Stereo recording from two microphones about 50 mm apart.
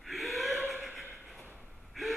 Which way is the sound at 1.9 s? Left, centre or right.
Centre.